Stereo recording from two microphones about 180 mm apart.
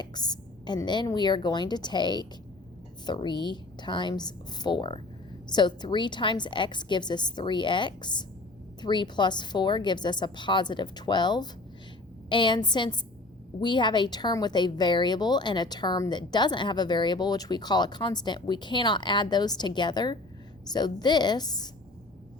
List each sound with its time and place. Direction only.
0.0 s speech: 25° left (ahead or behind)